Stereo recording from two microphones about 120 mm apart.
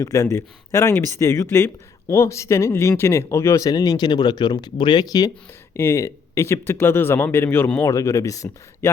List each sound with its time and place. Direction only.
0.0 s speech: 25° left (ahead or behind)
5.7 s speech: 20° left (ahead or behind)